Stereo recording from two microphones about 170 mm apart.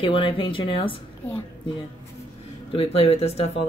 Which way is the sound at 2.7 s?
35° left (ahead or behind).